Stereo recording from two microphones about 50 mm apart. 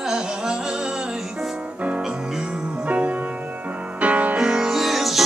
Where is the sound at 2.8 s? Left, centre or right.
Right.